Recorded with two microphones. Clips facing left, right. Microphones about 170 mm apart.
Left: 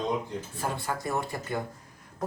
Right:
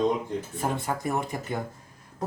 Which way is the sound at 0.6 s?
20° right (ahead or behind).